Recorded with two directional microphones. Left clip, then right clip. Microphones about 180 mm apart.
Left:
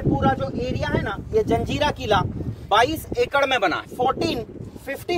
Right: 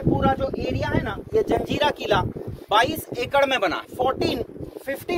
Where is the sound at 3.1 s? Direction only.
50° right (ahead or behind).